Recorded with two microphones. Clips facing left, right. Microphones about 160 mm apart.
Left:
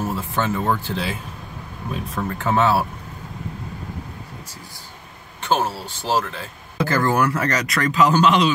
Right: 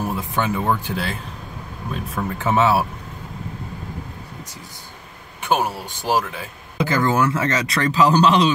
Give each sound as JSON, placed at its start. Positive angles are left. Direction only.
{"t": 0.0, "sound": "speech", "side_deg": -15}
{"t": 2.1, "sound": "speech", "side_deg": -15}
{"t": 5.4, "sound": "speech", "side_deg": -15}